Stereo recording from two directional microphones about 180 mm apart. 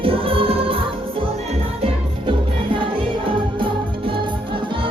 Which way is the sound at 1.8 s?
30° right (ahead or behind).